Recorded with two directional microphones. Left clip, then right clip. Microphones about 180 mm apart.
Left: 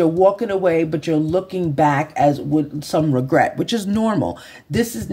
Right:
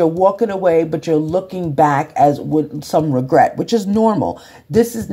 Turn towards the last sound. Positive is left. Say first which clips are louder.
# right 7 dB
turn(degrees=0)  # may be behind; listen again after turning